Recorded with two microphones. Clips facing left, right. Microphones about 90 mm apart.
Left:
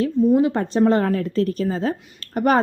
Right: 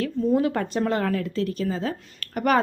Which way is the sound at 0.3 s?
25° left (ahead or behind).